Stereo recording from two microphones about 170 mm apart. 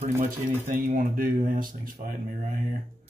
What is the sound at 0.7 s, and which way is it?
Speech, 55° right (ahead or behind).